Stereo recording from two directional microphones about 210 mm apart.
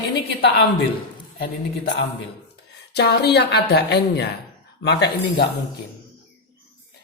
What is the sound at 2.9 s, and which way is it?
Speech, 50° left (ahead or behind).